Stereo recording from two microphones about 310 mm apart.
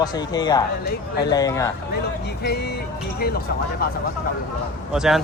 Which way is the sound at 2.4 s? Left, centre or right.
Left.